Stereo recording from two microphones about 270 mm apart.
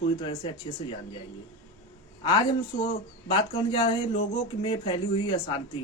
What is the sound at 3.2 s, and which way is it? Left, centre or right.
Speech, centre.